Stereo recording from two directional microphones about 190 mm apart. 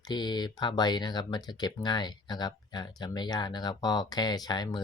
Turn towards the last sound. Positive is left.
turn(degrees=20)  # may be behind; listen again after turning